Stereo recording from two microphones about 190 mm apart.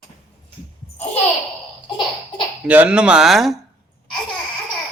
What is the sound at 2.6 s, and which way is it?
Speech, 5° right (ahead or behind).